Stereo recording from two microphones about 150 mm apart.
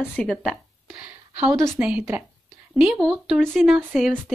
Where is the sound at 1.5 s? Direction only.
20° right (ahead or behind).